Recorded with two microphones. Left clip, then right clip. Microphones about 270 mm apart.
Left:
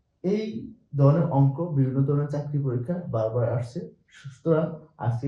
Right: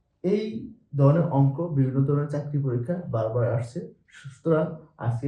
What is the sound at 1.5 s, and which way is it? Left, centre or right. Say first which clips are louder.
Speech: even; centre.